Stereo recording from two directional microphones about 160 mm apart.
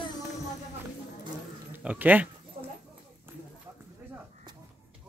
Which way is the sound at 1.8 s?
10° right (ahead or behind).